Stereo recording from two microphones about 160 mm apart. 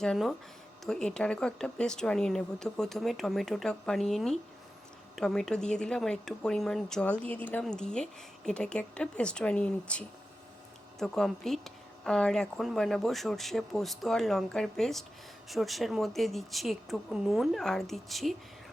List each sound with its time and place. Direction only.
0.0 s speech: 5° left (ahead or behind)
11.0 s speech: 5° left (ahead or behind)